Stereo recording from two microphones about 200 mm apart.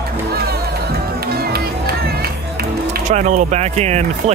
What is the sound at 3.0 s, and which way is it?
Speech, 35° right (ahead or behind).